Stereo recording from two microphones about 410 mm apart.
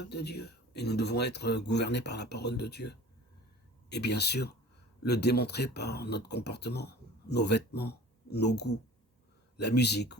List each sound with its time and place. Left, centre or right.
0.0 s speech: left